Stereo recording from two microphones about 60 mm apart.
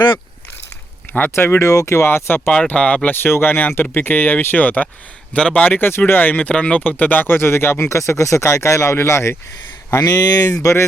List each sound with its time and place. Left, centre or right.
1.1 s speech: left
1.6 s speech: left
2.0 s speech: left
2.5 s speech: centre
3.2 s speech: left
10.1 s speech: left